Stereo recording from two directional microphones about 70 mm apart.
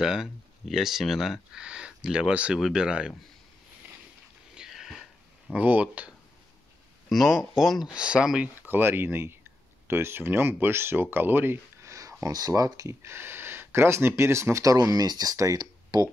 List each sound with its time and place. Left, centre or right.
0.0 s speech: centre
4.6 s a sound: centre
5.5 s speech: right
7.1 s speech: centre
8.6 s speech: right
11.8 s speech: right
15.5 s speech: right